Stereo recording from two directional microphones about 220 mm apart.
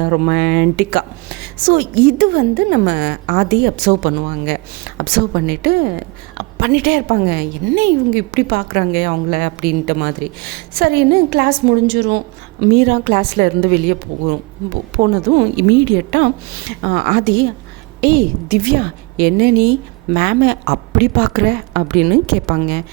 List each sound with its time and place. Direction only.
0.0 s a woman's voice: 45° right (ahead or behind)